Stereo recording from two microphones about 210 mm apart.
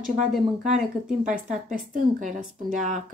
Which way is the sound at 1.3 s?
35° right (ahead or behind).